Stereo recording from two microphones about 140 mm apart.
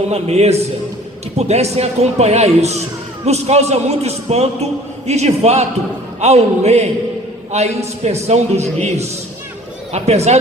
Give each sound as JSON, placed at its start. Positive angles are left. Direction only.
{"t": 0.1, "sound": "a man's voice", "side_deg": -50}